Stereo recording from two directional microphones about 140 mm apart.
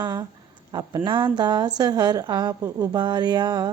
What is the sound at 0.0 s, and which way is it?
A woman's voice, 30° right (ahead or behind).